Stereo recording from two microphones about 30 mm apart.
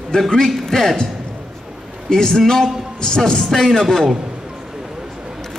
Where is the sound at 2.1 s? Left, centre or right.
Centre.